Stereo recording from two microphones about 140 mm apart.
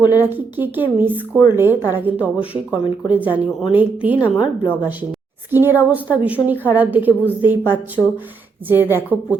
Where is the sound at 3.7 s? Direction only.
10° right (ahead or behind).